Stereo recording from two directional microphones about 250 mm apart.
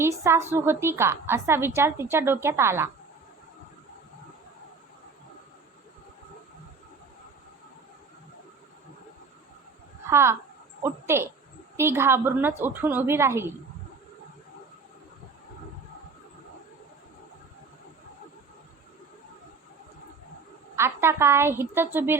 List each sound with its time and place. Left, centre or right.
0.0 s a woman's voice: centre
10.1 s a woman's voice: centre
20.7 s a woman's voice: centre